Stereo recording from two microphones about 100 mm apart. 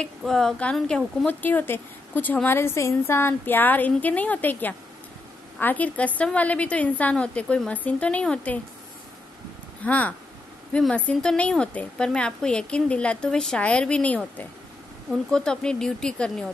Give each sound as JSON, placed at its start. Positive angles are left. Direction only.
{"t": 0.2, "sound": "a woman's voice", "side_deg": 5}
{"t": 1.4, "sound": "a woman's voice", "side_deg": 20}
{"t": 9.8, "sound": "a woman's voice", "side_deg": 15}